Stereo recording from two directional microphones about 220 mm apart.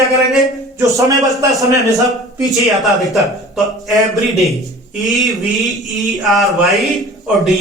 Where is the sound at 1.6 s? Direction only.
15° right (ahead or behind).